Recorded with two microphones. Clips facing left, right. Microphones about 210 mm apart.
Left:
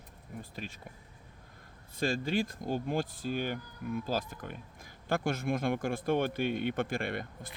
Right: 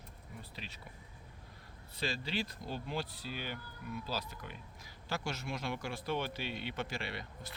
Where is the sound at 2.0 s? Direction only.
50° left (ahead or behind).